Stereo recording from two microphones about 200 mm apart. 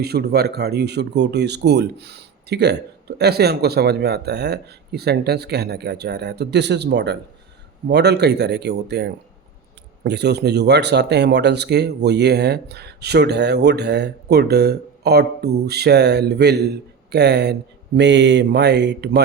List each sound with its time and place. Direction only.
0.0 s speech: 55° right (ahead or behind)